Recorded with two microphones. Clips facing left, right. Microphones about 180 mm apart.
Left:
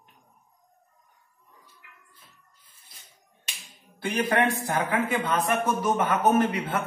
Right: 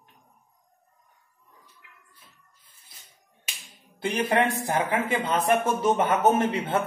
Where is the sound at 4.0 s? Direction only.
20° right (ahead or behind).